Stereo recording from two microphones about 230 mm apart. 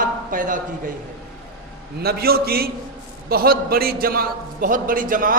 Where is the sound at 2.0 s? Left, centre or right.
Right.